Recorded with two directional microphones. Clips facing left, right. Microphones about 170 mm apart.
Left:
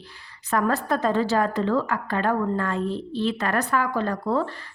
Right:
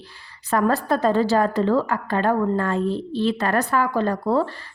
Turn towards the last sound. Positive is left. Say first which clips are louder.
# right 3 dB
turn(degrees=-35)  # may be behind; listen again after turning